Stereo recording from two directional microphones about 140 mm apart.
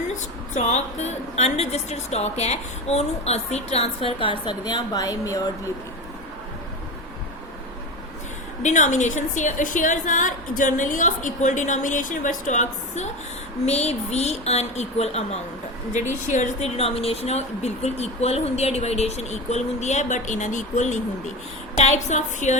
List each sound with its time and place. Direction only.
0.5 s a woman's voice: 55° left (ahead or behind); by 5.7 s 25° left (ahead or behind)
8.6 s a woman's voice: 60° left (ahead or behind)
13.7 s a woman's voice: 50° left (ahead or behind)
16.2 s a woman's voice: 60° left (ahead or behind)